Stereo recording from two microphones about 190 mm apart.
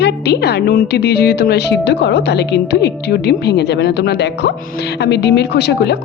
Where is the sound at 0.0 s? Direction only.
60° left (ahead or behind).